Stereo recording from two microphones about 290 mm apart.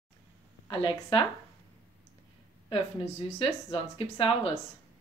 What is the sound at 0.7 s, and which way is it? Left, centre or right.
Speech, centre.